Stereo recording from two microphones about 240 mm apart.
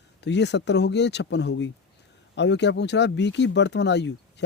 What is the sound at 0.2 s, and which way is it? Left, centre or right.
Speech, left.